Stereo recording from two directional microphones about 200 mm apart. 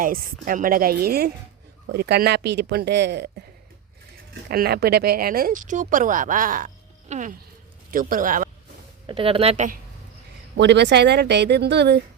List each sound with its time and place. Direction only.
0.0 s a woman's voice: 45° right (ahead or behind)
4.4 s speech: 50° right (ahead or behind)
9.0 s speech: 25° right (ahead or behind)
10.6 s a woman's voice: 60° right (ahead or behind)